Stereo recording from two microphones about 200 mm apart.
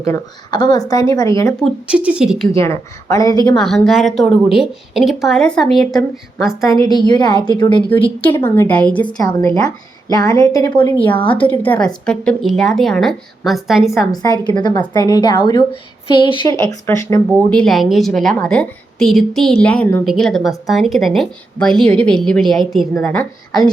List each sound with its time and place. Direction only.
0.0 s speech: 15° left (ahead or behind)
1.6 s a woman's voice: 5° right (ahead or behind)
2.5 s speech: 15° left (ahead or behind)
3.6 s a woman's voice: centre (ahead or behind)
6.7 s a woman's voice: 20° left (ahead or behind)
8.4 s speech: 10° left (ahead or behind)
9.0 s a woman's voice: 20° left (ahead or behind); by 13.9 s centre (ahead or behind)
13.9 s a woman's voice: 20° left (ahead or behind)
17.5 s a woman's voice: 5° left (ahead or behind)